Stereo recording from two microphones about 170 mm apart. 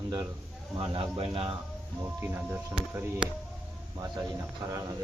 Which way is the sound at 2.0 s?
15° right (ahead or behind).